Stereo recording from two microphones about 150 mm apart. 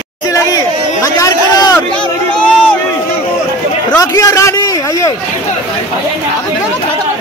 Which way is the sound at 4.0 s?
25° left (ahead or behind).